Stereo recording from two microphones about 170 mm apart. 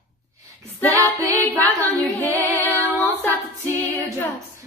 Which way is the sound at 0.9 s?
15° right (ahead or behind).